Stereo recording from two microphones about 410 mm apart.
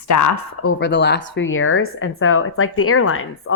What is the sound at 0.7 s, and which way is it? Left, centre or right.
Speech, left.